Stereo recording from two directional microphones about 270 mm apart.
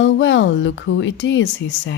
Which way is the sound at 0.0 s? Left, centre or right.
Left.